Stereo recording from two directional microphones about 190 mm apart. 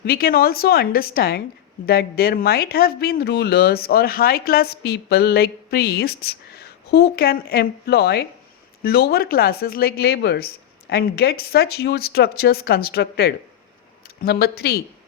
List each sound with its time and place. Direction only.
0.0 s a woman's voice: 55° left (ahead or behind)